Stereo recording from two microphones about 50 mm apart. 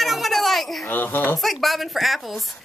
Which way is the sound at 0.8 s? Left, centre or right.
Left.